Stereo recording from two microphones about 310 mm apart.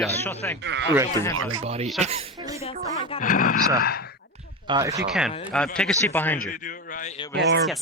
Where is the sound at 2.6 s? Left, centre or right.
Centre.